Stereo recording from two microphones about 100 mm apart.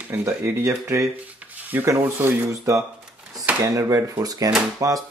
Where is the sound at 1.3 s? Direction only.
15° right (ahead or behind).